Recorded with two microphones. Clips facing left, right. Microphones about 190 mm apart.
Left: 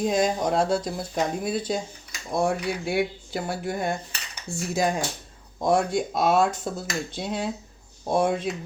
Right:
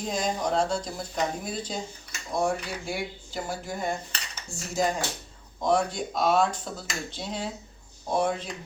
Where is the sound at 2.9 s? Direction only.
60° left (ahead or behind).